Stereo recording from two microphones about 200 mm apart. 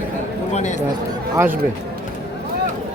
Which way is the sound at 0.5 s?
35° left (ahead or behind).